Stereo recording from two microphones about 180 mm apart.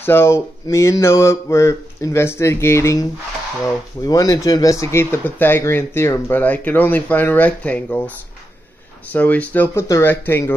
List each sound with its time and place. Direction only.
0.0 s speech: 15° left (ahead or behind)
9.1 s speech: 10° left (ahead or behind)